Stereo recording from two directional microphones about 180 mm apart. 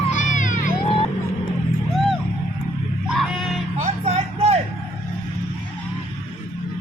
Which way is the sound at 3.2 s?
Centre (ahead or behind).